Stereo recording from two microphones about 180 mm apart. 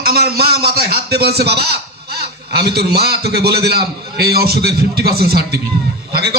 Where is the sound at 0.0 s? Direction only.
60° right (ahead or behind).